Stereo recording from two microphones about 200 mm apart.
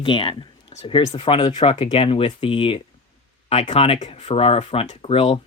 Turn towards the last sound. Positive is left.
turn(degrees=30)  # may be behind; listen again after turning